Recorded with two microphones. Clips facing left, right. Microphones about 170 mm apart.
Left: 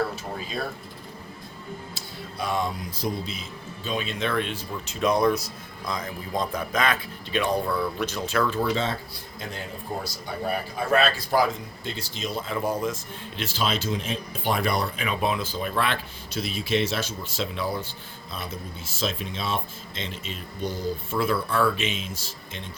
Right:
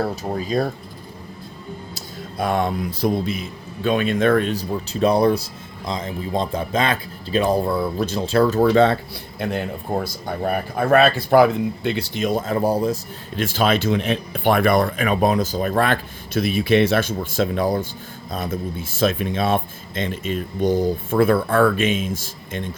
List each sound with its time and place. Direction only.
0.0 s speech: 40° right (ahead or behind)
2.0 s speech: 55° right (ahead or behind); by 8.7 s 40° right (ahead or behind)
8.7 s a man's voice: 60° right (ahead or behind)